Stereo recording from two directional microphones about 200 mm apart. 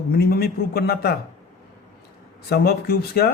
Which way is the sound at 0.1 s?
50° left (ahead or behind).